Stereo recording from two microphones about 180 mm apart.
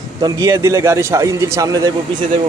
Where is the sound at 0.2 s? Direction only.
20° right (ahead or behind).